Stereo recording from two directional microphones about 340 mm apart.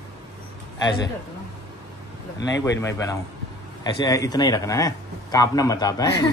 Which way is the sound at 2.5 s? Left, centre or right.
Centre.